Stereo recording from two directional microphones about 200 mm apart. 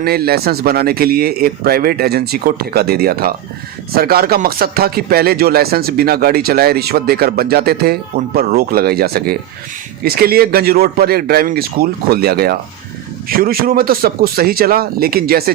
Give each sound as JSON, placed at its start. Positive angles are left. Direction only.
{"t": 0.0, "sound": "speech", "side_deg": -50}